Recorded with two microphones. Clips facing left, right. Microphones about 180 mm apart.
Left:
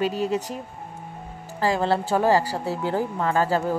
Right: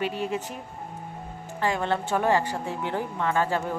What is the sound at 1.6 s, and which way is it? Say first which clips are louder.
Speech: left 4 dB; 35° left (ahead or behind).